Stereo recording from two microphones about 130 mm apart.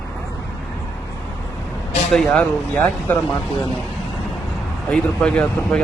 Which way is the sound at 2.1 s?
5° left (ahead or behind).